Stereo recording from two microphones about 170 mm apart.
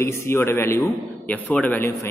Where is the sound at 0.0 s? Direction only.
15° left (ahead or behind).